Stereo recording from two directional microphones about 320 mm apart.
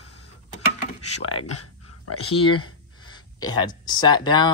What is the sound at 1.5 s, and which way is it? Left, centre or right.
Dog, left.